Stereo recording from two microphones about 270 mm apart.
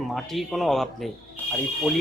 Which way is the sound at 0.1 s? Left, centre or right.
Centre.